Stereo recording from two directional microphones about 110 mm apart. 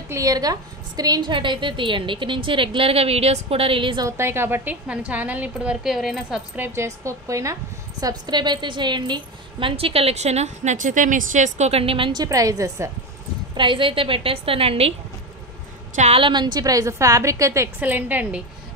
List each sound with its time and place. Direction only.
0.1 s a woman's voice: 35° right (ahead or behind); by 4.0 s 50° right (ahead or behind)
4.0 s a woman's voice: 25° right (ahead or behind); by 6.4 s centre (ahead or behind)
6.5 s a woman's voice: 20° right (ahead or behind)
8.0 s a woman's voice: 40° right (ahead or behind); by 12.1 s 60° right (ahead or behind)
12.1 s a woman's voice: 35° right (ahead or behind)
13.6 s a woman's voice: 50° right (ahead or behind)
16.2 s a woman's voice: 45° right (ahead or behind); by 17.6 s 30° right (ahead or behind)
17.7 s a woman's voice: 15° right (ahead or behind)